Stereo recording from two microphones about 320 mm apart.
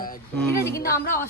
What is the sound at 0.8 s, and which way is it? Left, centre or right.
Speech, left.